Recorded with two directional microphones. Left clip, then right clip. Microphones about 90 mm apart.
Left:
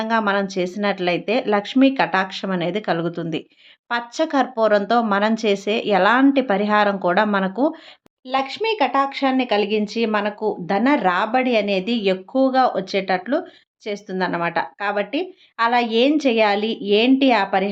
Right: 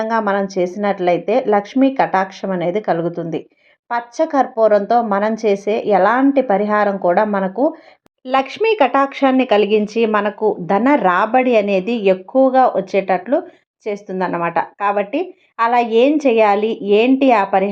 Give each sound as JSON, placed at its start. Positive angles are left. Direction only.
{"t": 0.1, "sound": "a woman's voice", "side_deg": 15}
{"t": 8.3, "sound": "a woman's voice", "side_deg": -40}